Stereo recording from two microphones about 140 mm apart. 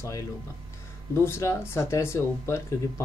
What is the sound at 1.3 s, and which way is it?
Speech, 20° left (ahead or behind).